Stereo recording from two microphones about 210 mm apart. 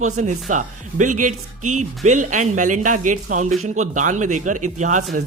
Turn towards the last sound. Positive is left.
turn(degrees=-35)  # may be behind; listen again after turning